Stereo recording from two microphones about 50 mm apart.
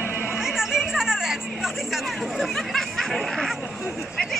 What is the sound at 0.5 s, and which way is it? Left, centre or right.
Music, centre.